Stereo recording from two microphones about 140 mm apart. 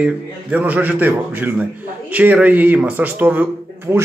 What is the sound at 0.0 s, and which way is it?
A man's voice, 10° right (ahead or behind).